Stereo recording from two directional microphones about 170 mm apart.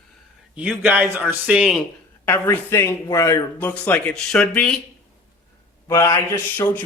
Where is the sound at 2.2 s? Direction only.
10° left (ahead or behind).